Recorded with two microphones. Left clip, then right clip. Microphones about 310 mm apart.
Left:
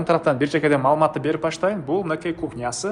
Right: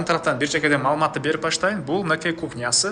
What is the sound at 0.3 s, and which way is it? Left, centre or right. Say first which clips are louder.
Speech: left 1 dB; centre.